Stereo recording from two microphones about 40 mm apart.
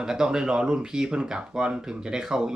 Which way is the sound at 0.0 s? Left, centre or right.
Centre.